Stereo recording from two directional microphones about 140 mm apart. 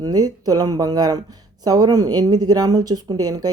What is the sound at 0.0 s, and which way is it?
Speech, 30° right (ahead or behind).